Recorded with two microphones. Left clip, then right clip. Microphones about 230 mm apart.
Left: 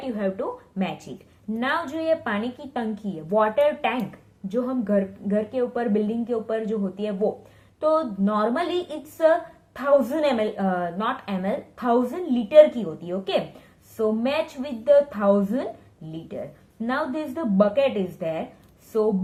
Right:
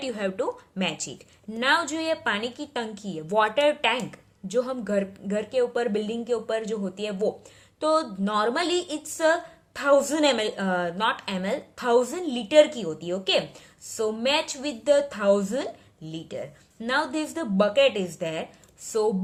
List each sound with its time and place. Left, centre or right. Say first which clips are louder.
0.0 s a woman's voice: even; right
16.8 s a woman's voice: right 1 dB; right